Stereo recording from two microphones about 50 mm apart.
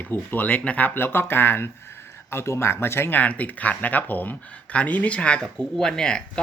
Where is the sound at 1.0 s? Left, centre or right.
Left.